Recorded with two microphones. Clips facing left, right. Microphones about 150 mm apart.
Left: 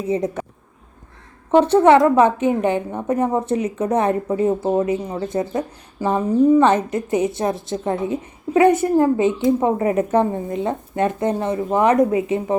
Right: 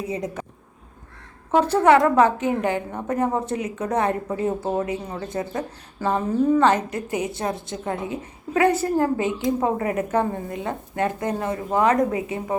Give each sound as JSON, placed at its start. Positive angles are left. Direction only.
{"t": 0.1, "sound": "a woman's voice", "side_deg": 25}
{"t": 1.5, "sound": "a woman's voice", "side_deg": 25}